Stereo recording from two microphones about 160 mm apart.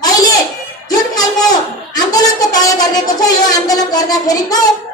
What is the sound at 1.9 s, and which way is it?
A woman's voice, 25° left (ahead or behind).